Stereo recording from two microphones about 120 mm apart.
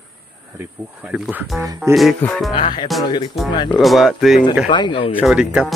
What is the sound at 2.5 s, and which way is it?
Speech, 40° left (ahead or behind).